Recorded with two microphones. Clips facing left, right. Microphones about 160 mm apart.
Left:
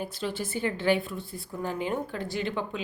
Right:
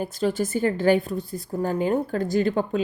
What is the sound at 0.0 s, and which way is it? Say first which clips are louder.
A woman's voice: right 8 dB; 45° right (ahead or behind).